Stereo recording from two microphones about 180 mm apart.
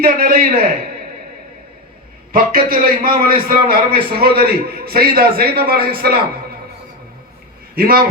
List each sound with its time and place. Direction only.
0.0 s a man's voice: 55° right (ahead or behind)
2.3 s a man's voice: 55° right (ahead or behind)
7.8 s a man's voice: 55° right (ahead or behind)